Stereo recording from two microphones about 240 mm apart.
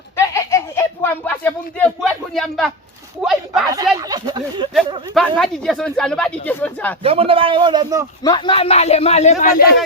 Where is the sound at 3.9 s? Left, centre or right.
Centre.